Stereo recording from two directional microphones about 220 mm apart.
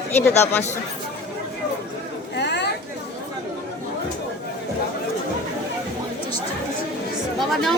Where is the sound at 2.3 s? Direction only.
50° left (ahead or behind).